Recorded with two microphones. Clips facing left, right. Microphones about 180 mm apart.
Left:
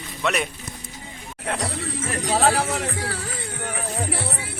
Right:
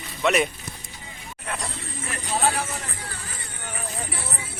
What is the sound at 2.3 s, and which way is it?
Speech, 85° left.